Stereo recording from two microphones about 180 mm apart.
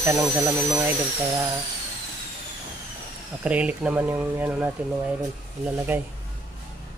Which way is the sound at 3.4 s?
5° right (ahead or behind).